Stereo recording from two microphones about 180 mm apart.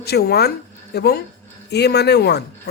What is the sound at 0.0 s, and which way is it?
A woman's voice, 65° left (ahead or behind).